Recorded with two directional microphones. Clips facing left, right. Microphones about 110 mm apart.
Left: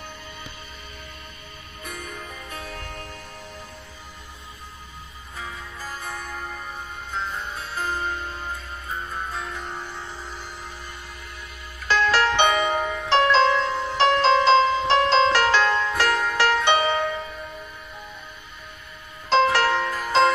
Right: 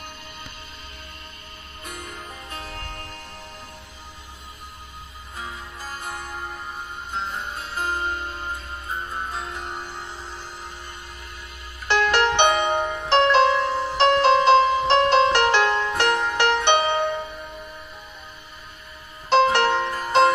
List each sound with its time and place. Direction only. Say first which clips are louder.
2.0 s music: even; 15° right (ahead or behind)
2.6 s music: even; 15° left (ahead or behind)
5.4 s music: even; 15° right (ahead or behind)
11.9 s music: right 1 dB; 20° right (ahead or behind)
13.5 s music: right 1 dB; 15° right (ahead or behind)
19.4 s music: right 1 dB; 20° right (ahead or behind)